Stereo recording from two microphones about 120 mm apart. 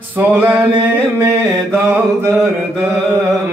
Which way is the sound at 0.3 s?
15° right (ahead or behind).